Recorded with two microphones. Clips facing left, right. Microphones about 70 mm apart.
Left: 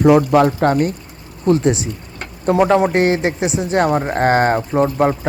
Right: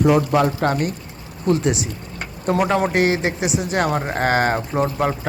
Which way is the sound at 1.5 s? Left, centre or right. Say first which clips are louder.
Left 4 dB; left.